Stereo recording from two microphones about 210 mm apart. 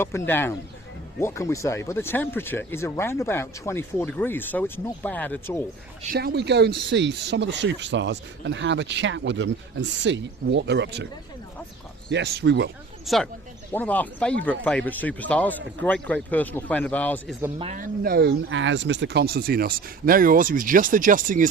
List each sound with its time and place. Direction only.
0.0 s speech: 10° left (ahead or behind)
6.1 s speech: 50° right (ahead or behind)
12.1 s speech: 50° right (ahead or behind)
13.1 s speech: centre (ahead or behind)
17.7 s speech: 40° right (ahead or behind)
18.4 s speech: 65° right (ahead or behind); by 21.4 s 40° right (ahead or behind)